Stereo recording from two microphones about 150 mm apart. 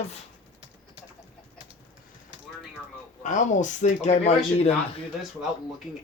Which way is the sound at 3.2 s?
55° left (ahead or behind).